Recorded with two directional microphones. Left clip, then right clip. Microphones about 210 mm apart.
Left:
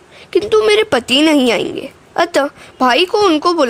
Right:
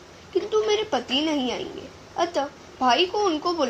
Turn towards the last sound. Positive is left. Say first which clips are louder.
# left 12 dB
turn(degrees=50)  # may be behind; listen again after turning